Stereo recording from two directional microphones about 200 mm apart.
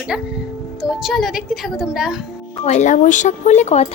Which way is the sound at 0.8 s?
Centre (ahead or behind).